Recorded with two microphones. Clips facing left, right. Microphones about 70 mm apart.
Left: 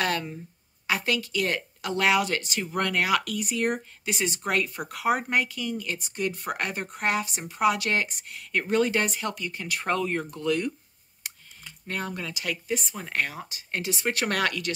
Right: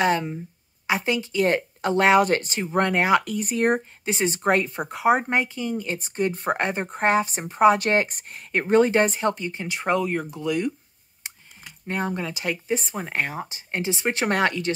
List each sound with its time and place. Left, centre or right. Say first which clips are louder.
0.0 s speech: right 6 dB; right
3.4 s speech: right 5 dB; right; by 10.7 s centre
11.2 s speech: right 1 dB; right